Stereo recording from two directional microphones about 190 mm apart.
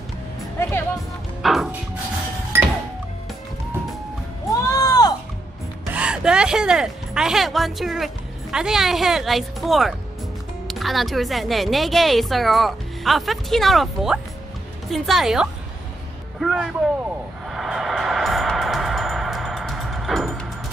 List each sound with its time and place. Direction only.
0.6 s music: 15° left (ahead or behind)
1.4 s music: centre (ahead or behind)
4.7 s music: 20° left (ahead or behind)
5.9 s speech: 5° right (ahead or behind)
16.3 s a sound: centre (ahead or behind)
17.5 s music: centre (ahead or behind)